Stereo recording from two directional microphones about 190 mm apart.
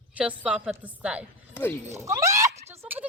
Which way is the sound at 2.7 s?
10° right (ahead or behind).